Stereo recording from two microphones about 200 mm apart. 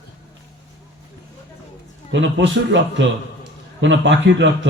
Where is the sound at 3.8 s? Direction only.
65° right (ahead or behind).